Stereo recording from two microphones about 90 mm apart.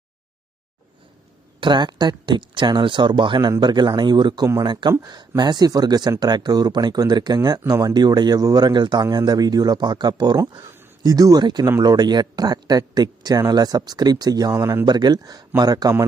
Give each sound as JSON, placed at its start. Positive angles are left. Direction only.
{"t": 1.6, "sound": "speech", "side_deg": -55}
{"t": 4.9, "sound": "speech", "side_deg": -45}
{"t": 14.5, "sound": "speech", "side_deg": -35}
{"t": 14.8, "sound": "speech", "side_deg": -50}